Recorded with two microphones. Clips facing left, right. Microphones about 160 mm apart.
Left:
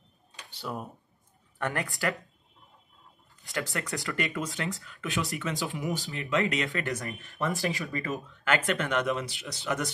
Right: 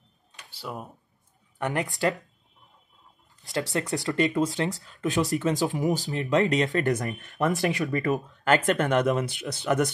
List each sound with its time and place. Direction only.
0.6 s speech: centre (ahead or behind)
1.6 s speech: 20° right (ahead or behind)
3.7 s speech: 20° right (ahead or behind)
4.6 s speech: 40° right (ahead or behind); by 8.2 s 60° right (ahead or behind)
8.5 s speech: 45° right (ahead or behind)